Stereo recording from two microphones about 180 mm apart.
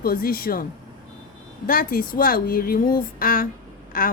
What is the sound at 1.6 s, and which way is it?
Speech, 50° left (ahead or behind).